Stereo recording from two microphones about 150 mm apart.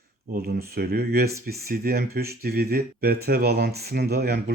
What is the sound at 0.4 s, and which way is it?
Speech, 90° right.